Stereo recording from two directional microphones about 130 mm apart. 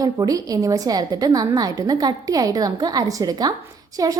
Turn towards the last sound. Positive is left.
turn(degrees=-30)  # may be behind; listen again after turning